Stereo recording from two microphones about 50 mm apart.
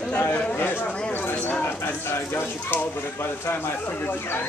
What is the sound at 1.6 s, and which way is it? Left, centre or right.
Speech, left.